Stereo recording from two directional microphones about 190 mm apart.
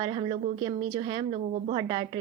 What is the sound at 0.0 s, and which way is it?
A woman's voice, 30° right (ahead or behind).